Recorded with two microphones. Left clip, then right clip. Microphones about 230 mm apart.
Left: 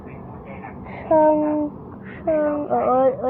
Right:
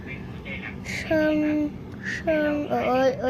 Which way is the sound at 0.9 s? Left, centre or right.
Centre.